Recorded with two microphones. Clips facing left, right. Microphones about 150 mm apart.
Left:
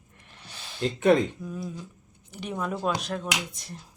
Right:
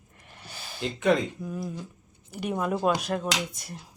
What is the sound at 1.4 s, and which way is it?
Speech, 5° right (ahead or behind).